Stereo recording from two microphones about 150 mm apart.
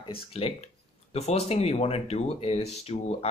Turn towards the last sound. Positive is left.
turn(degrees=45)  # may be behind; listen again after turning